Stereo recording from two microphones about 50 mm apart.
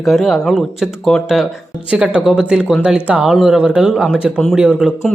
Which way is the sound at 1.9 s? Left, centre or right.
Centre.